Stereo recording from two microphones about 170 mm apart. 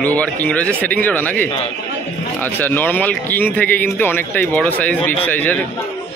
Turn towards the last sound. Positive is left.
turn(degrees=10)  # may be behind; listen again after turning